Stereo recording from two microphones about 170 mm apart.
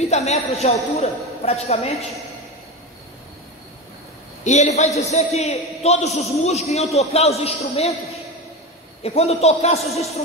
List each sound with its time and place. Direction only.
0.1 s a man's voice: 40° left (ahead or behind)
4.5 s a man's voice: 40° left (ahead or behind)